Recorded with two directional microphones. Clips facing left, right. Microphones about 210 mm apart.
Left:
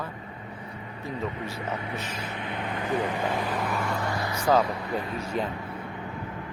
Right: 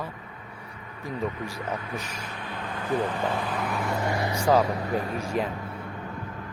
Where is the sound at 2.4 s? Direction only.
20° left (ahead or behind).